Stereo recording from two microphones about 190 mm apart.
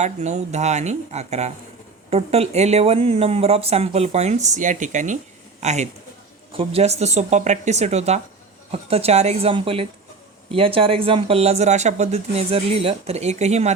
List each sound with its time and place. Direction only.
0.0 s a man's voice: 35° right (ahead or behind)